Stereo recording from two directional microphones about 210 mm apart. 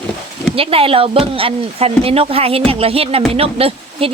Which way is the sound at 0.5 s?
25° right (ahead or behind).